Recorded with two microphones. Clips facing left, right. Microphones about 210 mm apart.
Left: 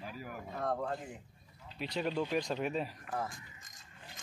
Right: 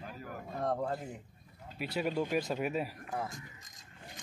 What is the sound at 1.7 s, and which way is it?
Speech, 5° right (ahead or behind).